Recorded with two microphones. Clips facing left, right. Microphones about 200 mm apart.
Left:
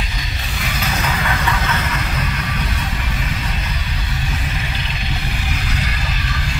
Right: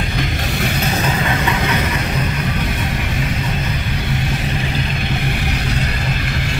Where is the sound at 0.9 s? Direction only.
25° right (ahead or behind).